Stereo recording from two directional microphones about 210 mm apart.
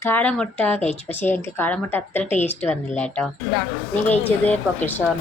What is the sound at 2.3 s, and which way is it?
Speech, 35° left (ahead or behind).